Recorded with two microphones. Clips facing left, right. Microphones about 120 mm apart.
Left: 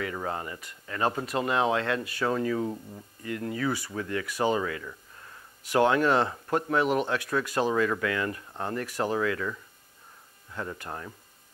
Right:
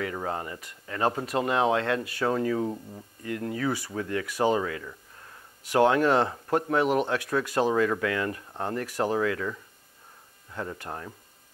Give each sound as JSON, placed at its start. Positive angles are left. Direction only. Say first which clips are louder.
{"t": 0.0, "sound": "speech", "louder": "right 1 dB", "side_deg": -30}